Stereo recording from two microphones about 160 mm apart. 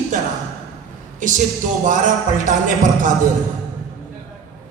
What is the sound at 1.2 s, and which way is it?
Speech, 55° right (ahead or behind).